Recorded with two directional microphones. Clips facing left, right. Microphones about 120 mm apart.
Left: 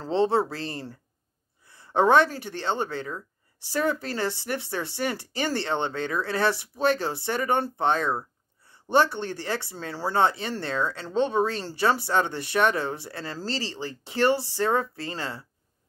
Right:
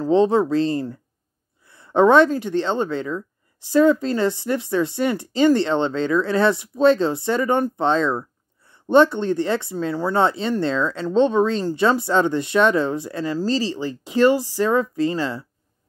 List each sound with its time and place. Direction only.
0.0 s a woman's voice: 15° right (ahead or behind)
2.0 s a woman's voice: 25° right (ahead or behind)